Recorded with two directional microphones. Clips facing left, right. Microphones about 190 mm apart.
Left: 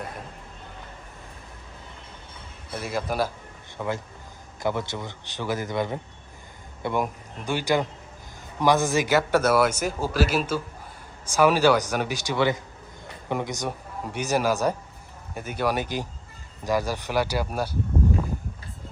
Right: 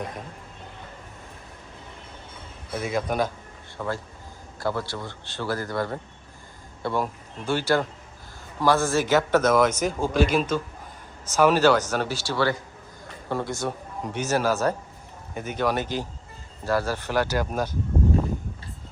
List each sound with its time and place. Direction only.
2.7 s speech: 5° left (ahead or behind)
3.8 s speech: 20° left (ahead or behind)